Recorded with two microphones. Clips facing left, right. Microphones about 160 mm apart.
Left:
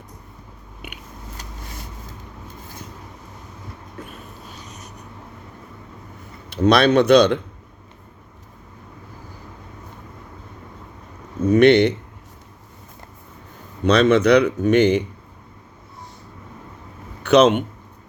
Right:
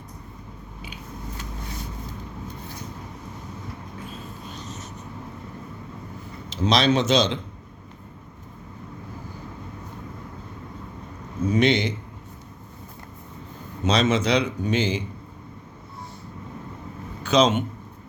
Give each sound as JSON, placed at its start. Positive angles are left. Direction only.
{"t": 6.5, "sound": "speech", "side_deg": 60}
{"t": 11.4, "sound": "speech", "side_deg": 60}
{"t": 13.8, "sound": "speech", "side_deg": 60}
{"t": 17.2, "sound": "speech", "side_deg": 65}